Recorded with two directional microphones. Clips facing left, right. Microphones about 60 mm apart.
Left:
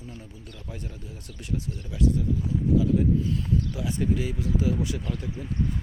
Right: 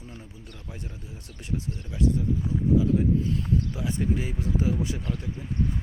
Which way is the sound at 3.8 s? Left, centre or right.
Right.